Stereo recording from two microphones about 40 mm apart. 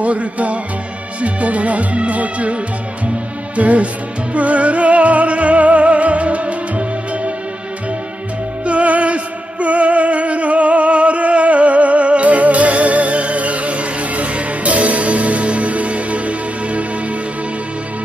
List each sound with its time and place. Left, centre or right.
0.0 s speech: right
1.2 s music: right
8.6 s music: right